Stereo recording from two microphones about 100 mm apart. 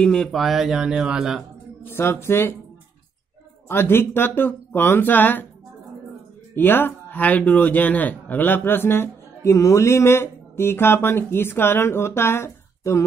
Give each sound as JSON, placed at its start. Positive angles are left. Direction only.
{"t": 0.0, "sound": "speech", "side_deg": 10}
{"t": 2.0, "sound": "speech", "side_deg": 25}
{"t": 3.6, "sound": "speech", "side_deg": 25}
{"t": 6.5, "sound": "speech", "side_deg": 20}